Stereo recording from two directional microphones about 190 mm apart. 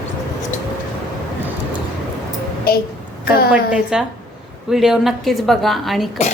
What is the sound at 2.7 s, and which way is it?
Speech, 50° left (ahead or behind).